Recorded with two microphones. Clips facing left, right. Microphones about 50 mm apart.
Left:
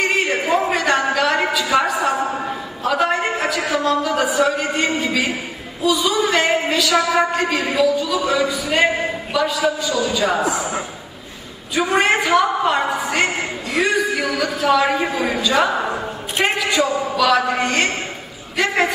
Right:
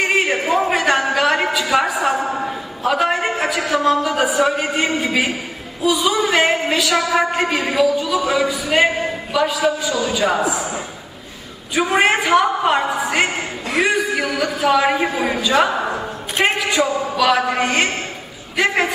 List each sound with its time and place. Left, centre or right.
0.0 s a sound: centre
3.7 s a man's voice: centre
10.2 s a woman's voice: centre
11.7 s a man's voice: centre
15.7 s a sound: centre
16.8 s a woman's voice: centre